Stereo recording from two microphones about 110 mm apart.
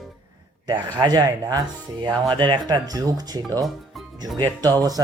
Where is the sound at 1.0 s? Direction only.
40° right (ahead or behind).